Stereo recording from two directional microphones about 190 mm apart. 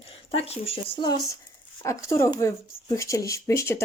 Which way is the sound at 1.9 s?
15° left (ahead or behind).